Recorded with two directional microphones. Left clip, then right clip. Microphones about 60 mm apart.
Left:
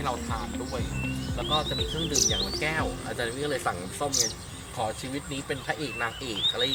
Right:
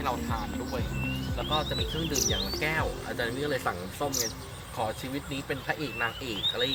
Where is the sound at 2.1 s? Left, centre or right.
Left.